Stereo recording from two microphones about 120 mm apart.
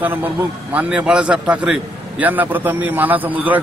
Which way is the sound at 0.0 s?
15° right (ahead or behind).